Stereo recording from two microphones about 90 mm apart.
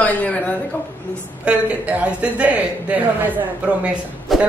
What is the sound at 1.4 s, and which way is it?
A woman's voice, 15° right (ahead or behind).